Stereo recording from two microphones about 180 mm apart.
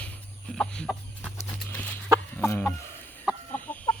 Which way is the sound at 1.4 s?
10° left (ahead or behind).